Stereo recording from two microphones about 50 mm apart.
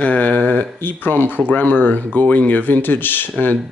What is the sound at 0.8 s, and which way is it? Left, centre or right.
Speech, left.